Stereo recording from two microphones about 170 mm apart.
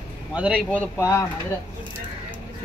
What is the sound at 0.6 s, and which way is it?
Speech, 10° left (ahead or behind).